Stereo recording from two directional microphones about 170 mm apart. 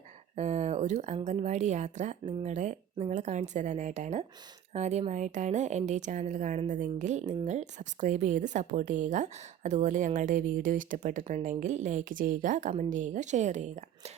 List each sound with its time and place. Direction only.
0.3 s a woman's voice: 40° right (ahead or behind)